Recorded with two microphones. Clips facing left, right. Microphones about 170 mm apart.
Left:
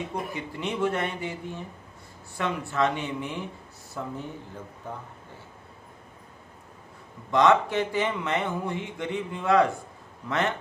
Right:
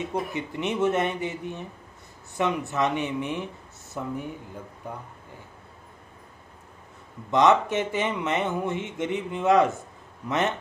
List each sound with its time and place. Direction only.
0.0 s speech: 20° right (ahead or behind)
7.2 s speech: 20° right (ahead or behind)